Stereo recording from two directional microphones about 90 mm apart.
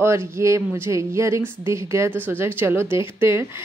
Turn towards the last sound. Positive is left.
turn(degrees=-30)  # may be behind; listen again after turning